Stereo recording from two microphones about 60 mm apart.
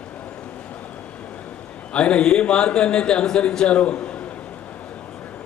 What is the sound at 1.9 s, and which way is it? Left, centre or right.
A man's voice, centre.